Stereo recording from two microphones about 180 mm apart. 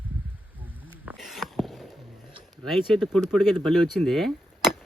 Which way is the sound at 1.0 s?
Centre (ahead or behind).